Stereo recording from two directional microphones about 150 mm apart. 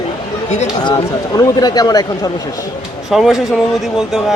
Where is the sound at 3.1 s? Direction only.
Centre (ahead or behind).